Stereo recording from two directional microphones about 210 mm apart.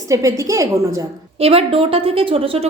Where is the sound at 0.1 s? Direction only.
15° right (ahead or behind).